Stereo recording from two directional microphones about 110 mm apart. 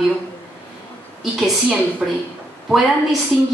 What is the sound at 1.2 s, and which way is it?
A woman's voice, 5° right (ahead or behind).